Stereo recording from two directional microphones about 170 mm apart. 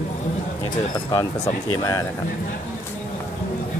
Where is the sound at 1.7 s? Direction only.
20° left (ahead or behind).